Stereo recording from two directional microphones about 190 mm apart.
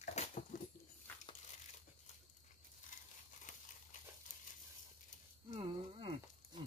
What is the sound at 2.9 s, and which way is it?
Crumpling, 40° left (ahead or behind).